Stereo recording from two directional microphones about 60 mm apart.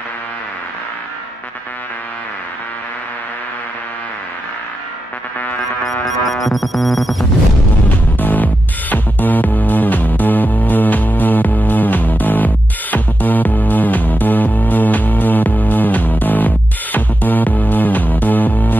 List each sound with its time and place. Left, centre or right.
5.9 s music: centre
8.2 s music: left